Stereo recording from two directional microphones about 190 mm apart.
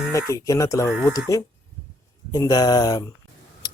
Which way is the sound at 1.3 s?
15° left (ahead or behind).